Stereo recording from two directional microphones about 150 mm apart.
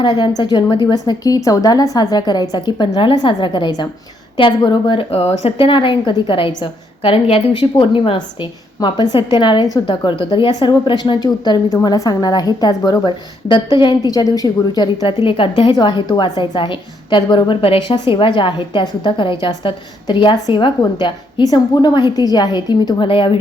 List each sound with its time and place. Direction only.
0.0 s a woman's voice: 30° left (ahead or behind)